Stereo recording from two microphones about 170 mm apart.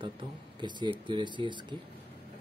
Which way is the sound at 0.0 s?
30° right (ahead or behind).